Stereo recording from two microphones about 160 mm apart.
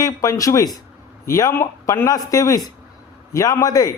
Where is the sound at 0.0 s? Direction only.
20° left (ahead or behind).